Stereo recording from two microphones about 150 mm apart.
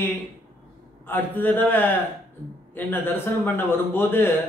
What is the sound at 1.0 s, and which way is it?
A man's voice, 15° left (ahead or behind).